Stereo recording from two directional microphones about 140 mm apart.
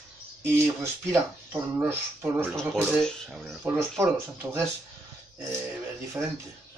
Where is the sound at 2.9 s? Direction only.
5° left (ahead or behind).